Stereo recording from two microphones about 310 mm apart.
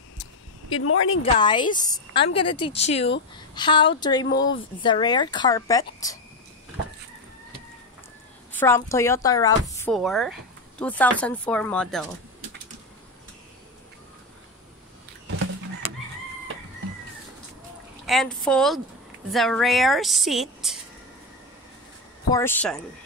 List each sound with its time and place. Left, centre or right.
0.2 s a sound: left
1.2 s a woman's voice: centre
8.5 s a woman's voice: centre
18.0 s a woman's voice: centre
22.3 s a woman's voice: centre